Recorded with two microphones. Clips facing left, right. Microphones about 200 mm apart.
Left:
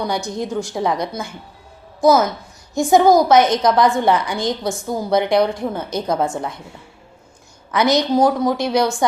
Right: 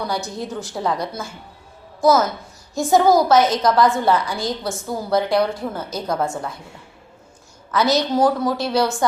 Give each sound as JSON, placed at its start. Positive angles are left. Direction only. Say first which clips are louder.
{"t": 0.1, "sound": "a woman's voice", "louder": "left 3 dB", "side_deg": 15}
{"t": 7.7, "sound": "a woman's voice", "louder": "left 2 dB", "side_deg": 15}